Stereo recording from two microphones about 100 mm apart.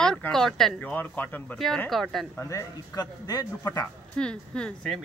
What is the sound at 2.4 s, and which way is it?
Speech, 30° left (ahead or behind).